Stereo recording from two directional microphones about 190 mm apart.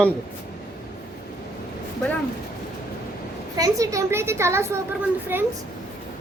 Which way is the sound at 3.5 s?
20° right (ahead or behind).